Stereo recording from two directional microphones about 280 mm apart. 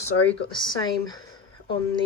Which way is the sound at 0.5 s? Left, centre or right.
Centre.